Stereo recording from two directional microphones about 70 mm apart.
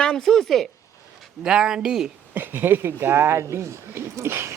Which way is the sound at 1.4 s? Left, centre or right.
Centre.